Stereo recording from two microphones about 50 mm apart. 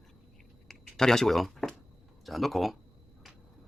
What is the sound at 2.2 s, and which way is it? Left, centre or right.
Speech, centre.